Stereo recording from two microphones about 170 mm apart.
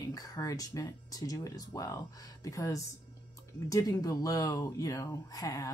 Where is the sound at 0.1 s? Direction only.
20° left (ahead or behind).